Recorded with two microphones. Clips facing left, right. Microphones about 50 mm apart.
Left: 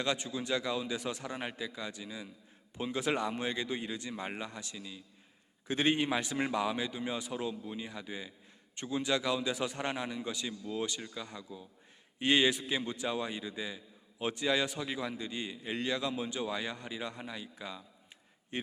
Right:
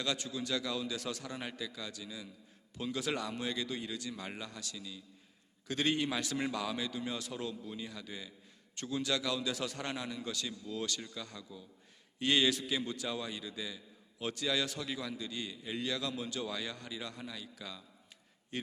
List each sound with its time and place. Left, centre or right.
0.0 s a man's voice: left